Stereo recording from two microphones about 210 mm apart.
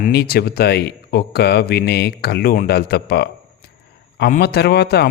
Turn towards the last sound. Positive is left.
turn(degrees=50)  # may be behind; listen again after turning